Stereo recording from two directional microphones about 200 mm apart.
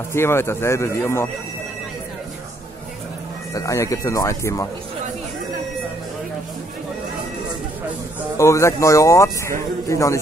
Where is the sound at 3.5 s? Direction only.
15° left (ahead or behind).